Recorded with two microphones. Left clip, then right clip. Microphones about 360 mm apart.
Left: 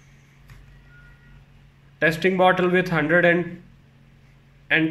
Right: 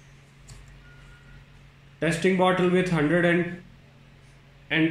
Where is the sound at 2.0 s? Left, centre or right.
Left.